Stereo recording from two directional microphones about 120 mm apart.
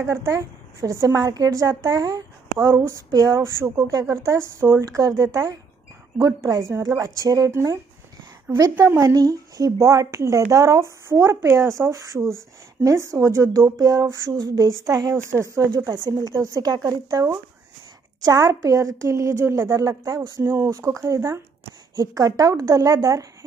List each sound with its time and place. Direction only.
0.0 s a woman's voice: 25° right (ahead or behind)